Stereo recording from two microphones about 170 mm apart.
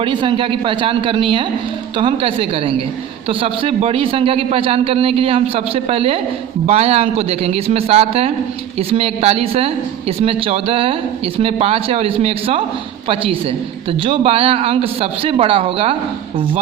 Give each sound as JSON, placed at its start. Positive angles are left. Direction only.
{"t": 0.0, "sound": "a man's voice", "side_deg": -30}
{"t": 14.0, "sound": "a man's voice", "side_deg": -30}